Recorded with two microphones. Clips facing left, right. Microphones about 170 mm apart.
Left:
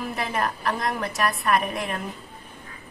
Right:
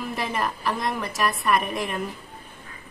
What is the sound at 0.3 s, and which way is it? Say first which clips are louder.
A woman's voice: left 2 dB; centre (ahead or behind).